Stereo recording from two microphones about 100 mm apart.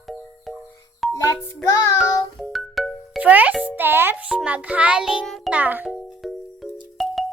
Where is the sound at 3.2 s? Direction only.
15° right (ahead or behind).